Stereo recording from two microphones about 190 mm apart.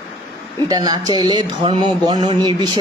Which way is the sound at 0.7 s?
20° right (ahead or behind).